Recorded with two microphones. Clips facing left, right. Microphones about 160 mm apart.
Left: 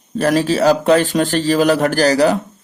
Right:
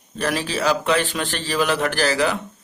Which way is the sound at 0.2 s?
40° left (ahead or behind).